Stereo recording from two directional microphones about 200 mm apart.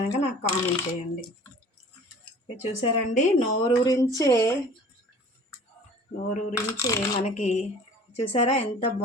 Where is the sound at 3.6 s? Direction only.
20° left (ahead or behind).